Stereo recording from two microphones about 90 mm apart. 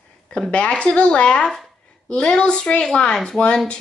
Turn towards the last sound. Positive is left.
turn(degrees=10)  # may be behind; listen again after turning